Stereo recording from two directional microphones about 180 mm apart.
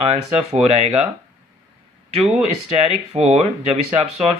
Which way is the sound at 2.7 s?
35° right (ahead or behind).